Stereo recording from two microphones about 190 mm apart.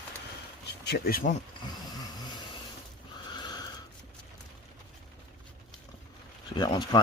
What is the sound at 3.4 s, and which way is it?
Neigh, 20° left (ahead or behind).